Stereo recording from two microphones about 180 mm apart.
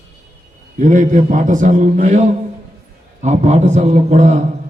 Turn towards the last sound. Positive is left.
turn(degrees=-40)  # may be behind; listen again after turning